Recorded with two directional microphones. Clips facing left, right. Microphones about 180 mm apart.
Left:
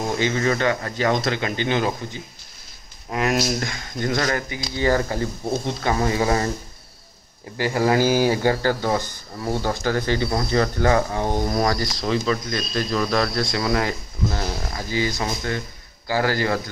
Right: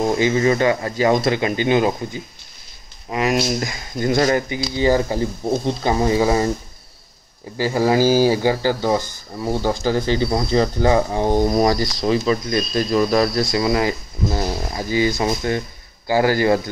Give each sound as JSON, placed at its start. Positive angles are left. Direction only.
{"t": 0.2, "sound": "speech", "side_deg": -15}
{"t": 3.1, "sound": "speech", "side_deg": -5}
{"t": 4.1, "sound": "speech", "side_deg": -25}
{"t": 7.7, "sound": "speech", "side_deg": -15}
{"t": 8.0, "sound": "speech", "side_deg": -35}
{"t": 8.3, "sound": "speech", "side_deg": -10}
{"t": 10.0, "sound": "speech", "side_deg": -25}